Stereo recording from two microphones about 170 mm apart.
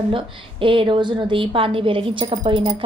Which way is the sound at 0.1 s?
30° right (ahead or behind).